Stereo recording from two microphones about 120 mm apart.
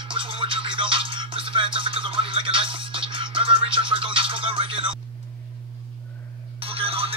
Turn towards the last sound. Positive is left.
turn(degrees=-50)  # may be behind; listen again after turning